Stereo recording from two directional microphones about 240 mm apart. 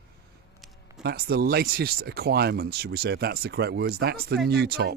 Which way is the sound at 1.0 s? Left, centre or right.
Right.